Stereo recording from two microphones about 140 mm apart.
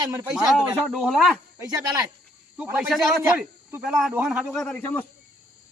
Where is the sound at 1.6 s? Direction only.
25° right (ahead or behind).